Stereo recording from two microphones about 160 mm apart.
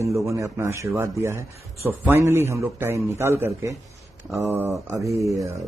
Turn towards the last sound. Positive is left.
turn(degrees=-20)  # may be behind; listen again after turning